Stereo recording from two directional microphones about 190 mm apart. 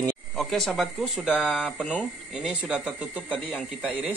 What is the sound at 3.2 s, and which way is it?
Speech, 10° left (ahead or behind).